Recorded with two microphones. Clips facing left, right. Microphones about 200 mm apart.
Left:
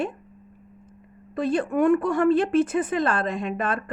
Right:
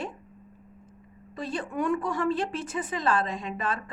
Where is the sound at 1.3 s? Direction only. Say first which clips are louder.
Left 8 dB; 55° left (ahead or behind).